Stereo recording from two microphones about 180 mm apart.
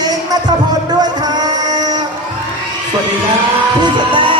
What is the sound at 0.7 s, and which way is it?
Music, 20° right (ahead or behind).